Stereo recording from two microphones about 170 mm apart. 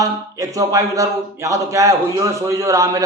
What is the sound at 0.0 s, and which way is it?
Speech, 20° right (ahead or behind).